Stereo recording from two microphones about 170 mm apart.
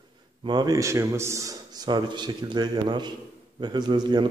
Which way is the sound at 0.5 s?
25° right (ahead or behind).